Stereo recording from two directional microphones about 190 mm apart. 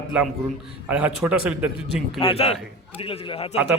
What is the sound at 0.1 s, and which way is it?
Speech, 5° right (ahead or behind).